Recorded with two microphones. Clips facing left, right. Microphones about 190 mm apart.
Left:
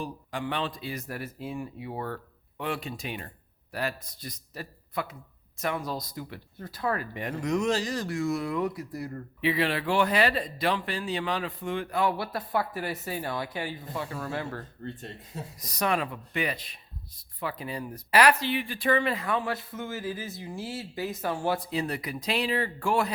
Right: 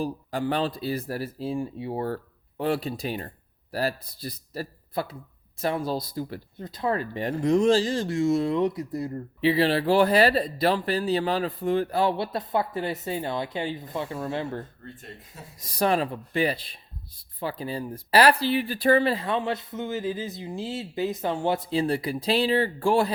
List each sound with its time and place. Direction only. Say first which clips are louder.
0.0 s a man's voice: right 6 dB; 35° right (ahead or behind)
6.6 s speech: right 3 dB; 20° right (ahead or behind)